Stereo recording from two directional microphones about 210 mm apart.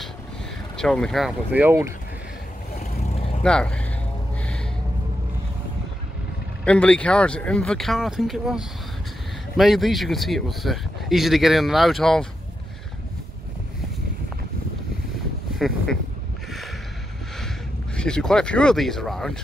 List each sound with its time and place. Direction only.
0.7 s speech: 5° left (ahead or behind)
3.2 s vehicle: 30° left (ahead or behind)
3.4 s speech: 5° left (ahead or behind)
6.6 s speech: 5° left (ahead or behind)
17.9 s speech: 5° left (ahead or behind)